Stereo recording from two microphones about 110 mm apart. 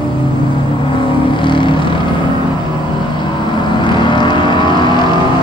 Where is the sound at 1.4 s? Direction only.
50° left (ahead or behind).